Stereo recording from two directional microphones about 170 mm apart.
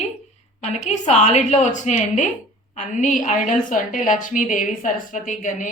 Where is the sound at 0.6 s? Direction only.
40° left (ahead or behind).